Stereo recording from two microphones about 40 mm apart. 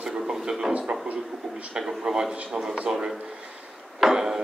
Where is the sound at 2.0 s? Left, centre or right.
Centre.